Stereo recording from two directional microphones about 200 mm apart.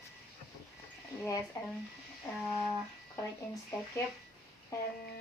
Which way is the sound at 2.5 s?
10° left (ahead or behind).